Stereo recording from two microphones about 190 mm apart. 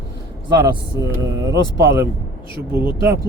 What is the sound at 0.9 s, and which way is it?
Speech, 20° right (ahead or behind).